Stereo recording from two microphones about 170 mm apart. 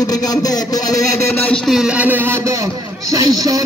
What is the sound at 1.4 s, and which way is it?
A man's voice, 5° left (ahead or behind).